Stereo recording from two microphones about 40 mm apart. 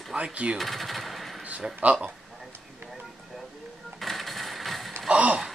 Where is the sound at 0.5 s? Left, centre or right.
Centre.